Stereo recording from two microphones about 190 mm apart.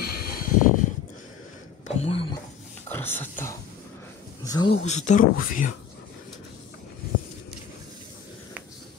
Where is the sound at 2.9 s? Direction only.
10° left (ahead or behind).